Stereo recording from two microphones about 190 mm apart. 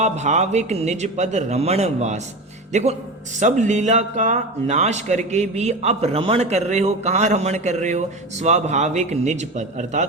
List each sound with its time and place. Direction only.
0.0 s speech: 35° right (ahead or behind)